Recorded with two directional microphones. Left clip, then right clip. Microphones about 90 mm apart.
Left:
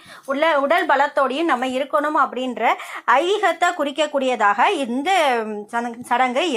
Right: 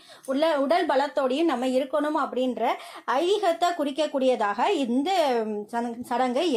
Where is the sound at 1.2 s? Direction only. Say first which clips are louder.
Left 5 dB; 25° right (ahead or behind).